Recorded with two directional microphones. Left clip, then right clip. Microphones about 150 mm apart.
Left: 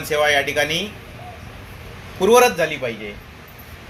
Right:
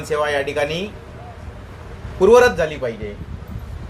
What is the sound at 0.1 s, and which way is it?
Speech, 10° right (ahead or behind).